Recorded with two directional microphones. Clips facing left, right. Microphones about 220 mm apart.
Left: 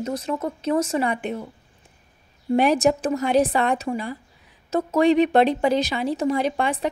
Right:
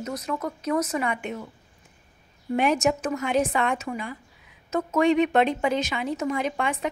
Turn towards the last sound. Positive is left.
turn(degrees=35)  # may be behind; listen again after turning